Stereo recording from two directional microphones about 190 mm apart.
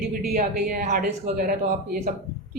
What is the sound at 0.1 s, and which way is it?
Speech, 45° right (ahead or behind).